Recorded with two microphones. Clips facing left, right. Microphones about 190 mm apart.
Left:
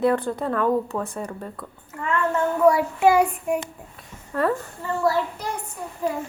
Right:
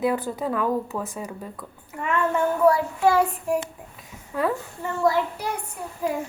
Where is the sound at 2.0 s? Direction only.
20° right (ahead or behind).